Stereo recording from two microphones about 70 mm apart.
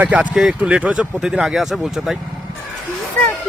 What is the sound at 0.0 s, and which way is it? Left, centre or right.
Speech, centre.